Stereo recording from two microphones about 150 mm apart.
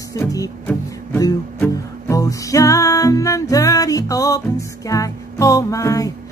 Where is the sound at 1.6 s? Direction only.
20° left (ahead or behind).